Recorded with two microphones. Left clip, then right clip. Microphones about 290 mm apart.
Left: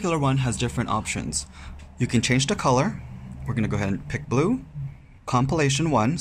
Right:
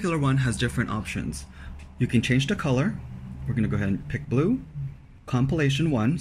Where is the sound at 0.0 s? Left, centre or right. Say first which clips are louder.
Left 2 dB; centre.